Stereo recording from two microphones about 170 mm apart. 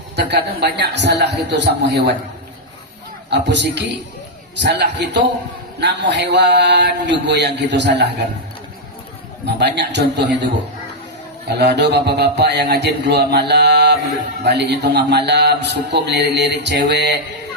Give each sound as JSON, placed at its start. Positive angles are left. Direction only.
{"t": 0.2, "sound": "a man's voice", "side_deg": -75}
{"t": 3.2, "sound": "a man's voice", "side_deg": -90}
{"t": 4.6, "sound": "mantra", "side_deg": -85}
{"t": 9.6, "sound": "mantra", "side_deg": -85}
{"t": 11.4, "sound": "a man's voice", "side_deg": -85}